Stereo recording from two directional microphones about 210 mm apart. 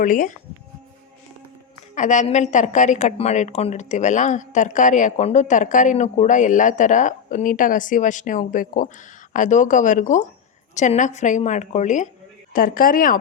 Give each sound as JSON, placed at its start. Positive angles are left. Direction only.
{"t": 0.0, "sound": "a woman's voice", "side_deg": 40}
{"t": 2.0, "sound": "a woman's voice", "side_deg": 35}